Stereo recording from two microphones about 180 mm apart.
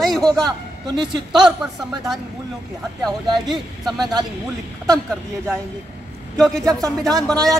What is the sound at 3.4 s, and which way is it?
Speech, centre (ahead or behind).